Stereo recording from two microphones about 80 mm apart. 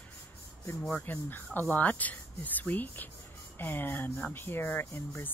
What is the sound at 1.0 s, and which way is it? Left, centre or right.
Speech, left.